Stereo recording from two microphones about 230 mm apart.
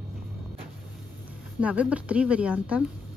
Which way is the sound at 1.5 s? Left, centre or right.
Centre.